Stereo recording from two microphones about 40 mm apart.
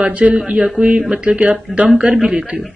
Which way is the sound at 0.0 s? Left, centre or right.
Right.